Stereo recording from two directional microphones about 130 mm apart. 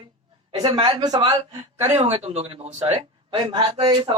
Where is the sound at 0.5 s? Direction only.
35° right (ahead or behind).